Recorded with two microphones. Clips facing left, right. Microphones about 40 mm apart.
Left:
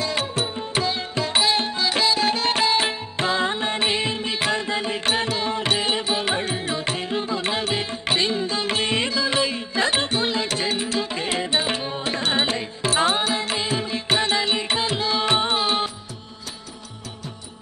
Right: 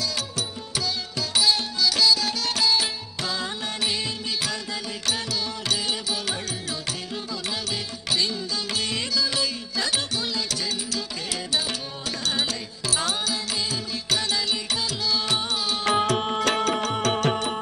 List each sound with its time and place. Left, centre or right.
0.7 s music: left
5.7 s music: left
7.7 s music: left
12.4 s music: left
15.8 s music: right